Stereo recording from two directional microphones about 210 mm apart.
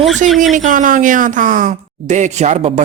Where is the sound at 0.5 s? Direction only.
35° right (ahead or behind).